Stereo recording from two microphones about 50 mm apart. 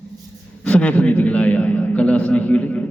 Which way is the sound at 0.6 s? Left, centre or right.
Left.